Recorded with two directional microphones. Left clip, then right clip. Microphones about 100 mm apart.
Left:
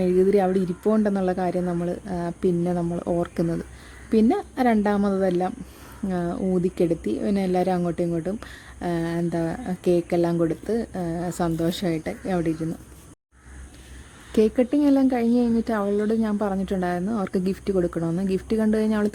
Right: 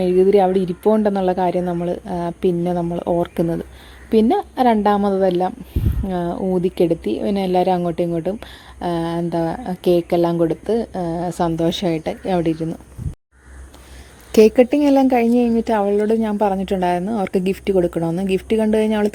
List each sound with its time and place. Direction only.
0.0 s speech: 5° right (ahead or behind)
11.9 s speech: 25° right (ahead or behind)
14.3 s speech: 45° right (ahead or behind)
15.4 s speech: 20° right (ahead or behind)
18.0 s speech: 10° right (ahead or behind)